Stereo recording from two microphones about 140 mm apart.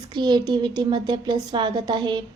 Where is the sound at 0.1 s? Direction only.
30° right (ahead or behind).